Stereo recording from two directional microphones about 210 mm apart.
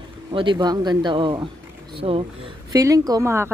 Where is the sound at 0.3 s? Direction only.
25° right (ahead or behind).